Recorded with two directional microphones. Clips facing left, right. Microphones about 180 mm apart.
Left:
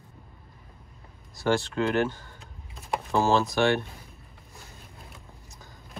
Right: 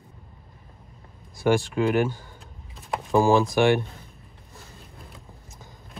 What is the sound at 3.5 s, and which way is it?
Speech, 15° right (ahead or behind).